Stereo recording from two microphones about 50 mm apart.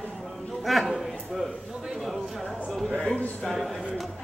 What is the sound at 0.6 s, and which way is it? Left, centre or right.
A man's voice, centre.